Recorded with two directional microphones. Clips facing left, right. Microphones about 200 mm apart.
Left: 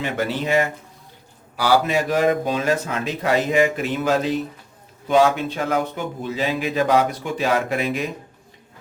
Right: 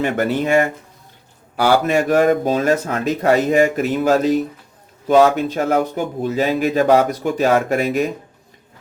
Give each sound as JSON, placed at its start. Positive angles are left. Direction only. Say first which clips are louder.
{"t": 0.0, "sound": "speech", "louder": "right 5 dB", "side_deg": -50}